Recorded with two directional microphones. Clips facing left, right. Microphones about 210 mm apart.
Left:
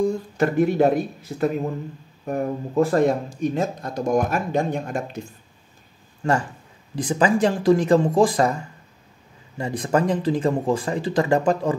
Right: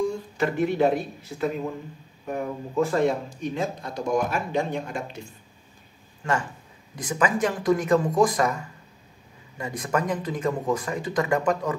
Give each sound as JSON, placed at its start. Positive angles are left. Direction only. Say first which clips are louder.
{"t": 0.0, "sound": "speech", "louder": "left 4 dB", "side_deg": 45}
{"t": 6.2, "sound": "speech", "louder": "left 5 dB", "side_deg": 30}